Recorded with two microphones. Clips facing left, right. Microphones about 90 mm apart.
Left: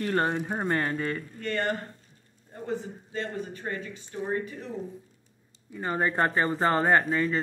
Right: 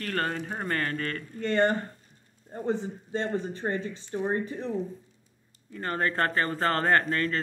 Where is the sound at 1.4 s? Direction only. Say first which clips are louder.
Right 6 dB; 25° right (ahead or behind).